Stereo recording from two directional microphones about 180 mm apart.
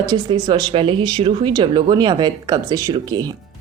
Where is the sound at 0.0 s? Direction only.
20° right (ahead or behind).